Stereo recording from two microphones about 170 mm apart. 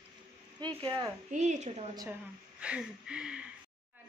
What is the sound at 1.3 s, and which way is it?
Speech, 45° right (ahead or behind).